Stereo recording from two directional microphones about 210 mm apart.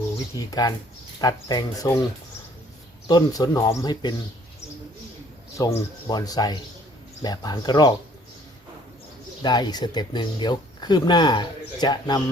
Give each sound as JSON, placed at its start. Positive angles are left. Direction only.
{"t": 0.3, "sound": "speech", "side_deg": 15}
{"t": 3.1, "sound": "speech", "side_deg": 20}
{"t": 5.5, "sound": "speech", "side_deg": 15}
{"t": 9.4, "sound": "speech", "side_deg": 20}